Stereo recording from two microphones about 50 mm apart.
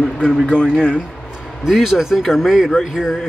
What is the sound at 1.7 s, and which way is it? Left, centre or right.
Speech, centre.